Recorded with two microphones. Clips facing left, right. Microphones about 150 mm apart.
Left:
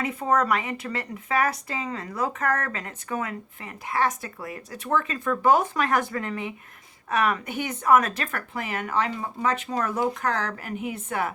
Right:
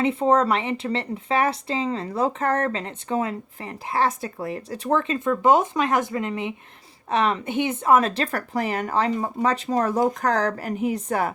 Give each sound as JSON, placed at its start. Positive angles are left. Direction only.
{"t": 0.0, "sound": "speech", "side_deg": -30}